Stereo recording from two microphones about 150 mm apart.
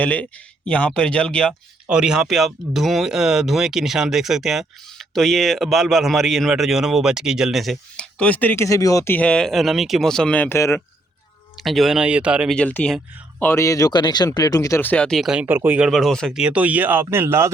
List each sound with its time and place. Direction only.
0.0 s speech: 10° left (ahead or behind)
1.9 s speech: 5° right (ahead or behind); by 9.1 s 20° left (ahead or behind)
9.1 s speech: 5° left (ahead or behind)
11.5 s speech: centre (ahead or behind)
12.5 s speech: 10° left (ahead or behind)
13.4 s speech: 20° left (ahead or behind); by 15.9 s 10° right (ahead or behind)
15.9 s speech: centre (ahead or behind)
16.4 s speech: 10° right (ahead or behind)